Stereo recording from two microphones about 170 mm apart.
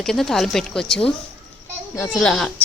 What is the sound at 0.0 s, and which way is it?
A woman's voice, centre (ahead or behind).